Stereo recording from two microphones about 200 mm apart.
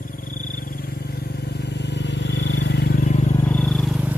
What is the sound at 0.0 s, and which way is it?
Vehicle, 45° left (ahead or behind).